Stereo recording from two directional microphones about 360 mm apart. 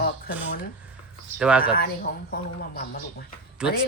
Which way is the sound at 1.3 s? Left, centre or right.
Centre.